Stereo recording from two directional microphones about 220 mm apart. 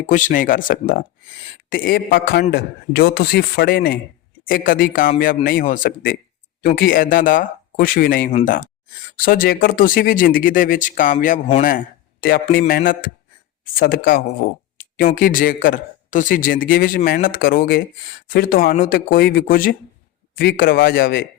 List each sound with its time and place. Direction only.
0.1 s a man's voice: 35° left (ahead or behind)
12.2 s a man's voice: 40° left (ahead or behind)